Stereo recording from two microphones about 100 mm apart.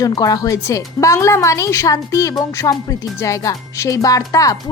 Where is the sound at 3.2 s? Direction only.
35° left (ahead or behind).